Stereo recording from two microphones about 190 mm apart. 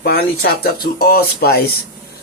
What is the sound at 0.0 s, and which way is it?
Speech, 55° left (ahead or behind).